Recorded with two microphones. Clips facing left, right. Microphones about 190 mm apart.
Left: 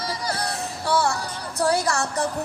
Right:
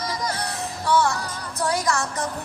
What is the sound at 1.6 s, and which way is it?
Speech, 35° left (ahead or behind).